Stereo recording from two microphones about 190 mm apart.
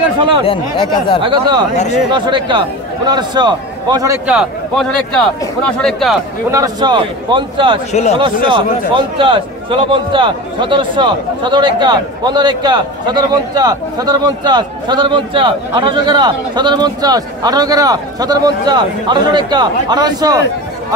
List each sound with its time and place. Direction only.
0.5 s speech: 25° left (ahead or behind)
1.2 s a man's voice: 20° right (ahead or behind)
4.3 s speech: centre (ahead or behind)
6.5 s a man's voice: 20° right (ahead or behind)
7.9 s speech: 35° left (ahead or behind)
8.2 s a man's voice: 25° right (ahead or behind)